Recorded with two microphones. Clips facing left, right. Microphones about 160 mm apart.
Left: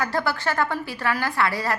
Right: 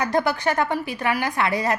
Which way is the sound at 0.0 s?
20° right (ahead or behind).